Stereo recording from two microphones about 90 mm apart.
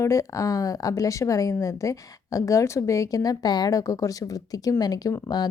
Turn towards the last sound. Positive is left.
turn(degrees=50)  # may be behind; listen again after turning